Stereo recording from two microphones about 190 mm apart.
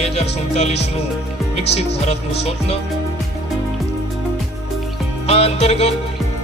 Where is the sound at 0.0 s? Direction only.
35° left (ahead or behind).